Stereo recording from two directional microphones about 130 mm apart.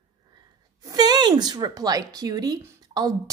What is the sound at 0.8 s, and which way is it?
A woman's voice, 30° right (ahead or behind).